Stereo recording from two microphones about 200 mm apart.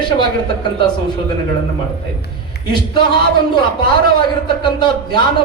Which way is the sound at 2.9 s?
20° left (ahead or behind).